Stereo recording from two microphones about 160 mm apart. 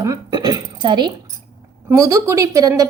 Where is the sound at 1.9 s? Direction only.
20° right (ahead or behind).